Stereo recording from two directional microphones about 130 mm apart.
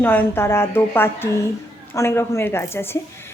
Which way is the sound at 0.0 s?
15° left (ahead or behind).